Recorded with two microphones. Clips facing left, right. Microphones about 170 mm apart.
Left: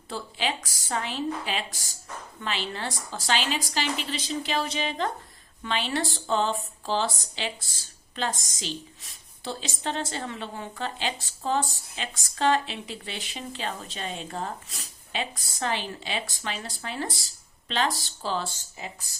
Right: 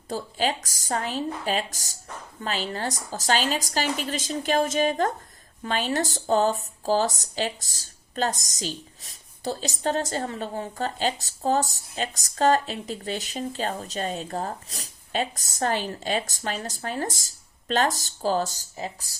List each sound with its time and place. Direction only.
0.1 s speech: 45° right (ahead or behind)